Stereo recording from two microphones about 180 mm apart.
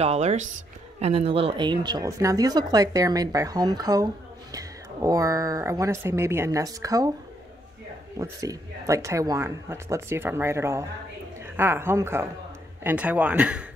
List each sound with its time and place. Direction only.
0.0 s speech: 35° right (ahead or behind); by 7.1 s 20° right (ahead or behind)
8.2 s speech: 20° right (ahead or behind)